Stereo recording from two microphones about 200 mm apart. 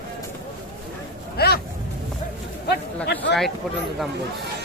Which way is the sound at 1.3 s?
50° left (ahead or behind).